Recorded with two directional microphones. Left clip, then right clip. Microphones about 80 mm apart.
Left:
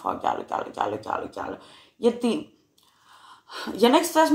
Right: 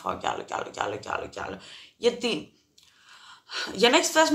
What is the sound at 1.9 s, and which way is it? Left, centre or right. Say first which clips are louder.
Speech: left 2 dB; left.